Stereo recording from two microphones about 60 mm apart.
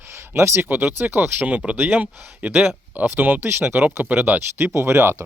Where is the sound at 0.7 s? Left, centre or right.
Right.